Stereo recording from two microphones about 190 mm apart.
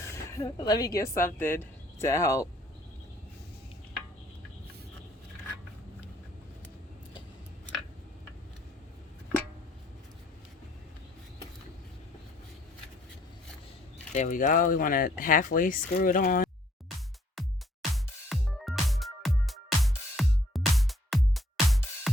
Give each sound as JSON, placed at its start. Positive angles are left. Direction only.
{"t": 0.0, "sound": "speech", "side_deg": 15}
{"t": 14.1, "sound": "speech", "side_deg": 40}
{"t": 17.9, "sound": "music", "side_deg": 0}